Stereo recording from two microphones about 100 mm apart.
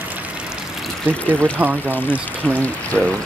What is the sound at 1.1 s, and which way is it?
Speech, 20° right (ahead or behind).